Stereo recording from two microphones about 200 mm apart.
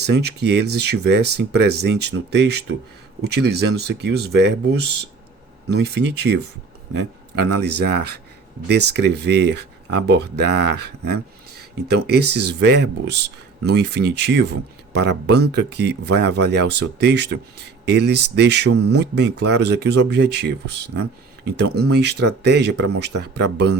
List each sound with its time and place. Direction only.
0.0 s speech: 55° right (ahead or behind)